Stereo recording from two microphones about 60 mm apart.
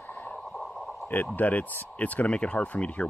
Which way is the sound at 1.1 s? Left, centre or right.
Left.